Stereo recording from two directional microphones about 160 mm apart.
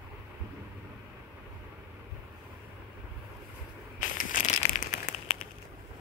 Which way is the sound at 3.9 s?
55° left (ahead or behind).